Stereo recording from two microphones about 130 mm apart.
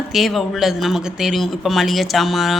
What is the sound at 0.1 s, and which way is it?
Speech, centre (ahead or behind).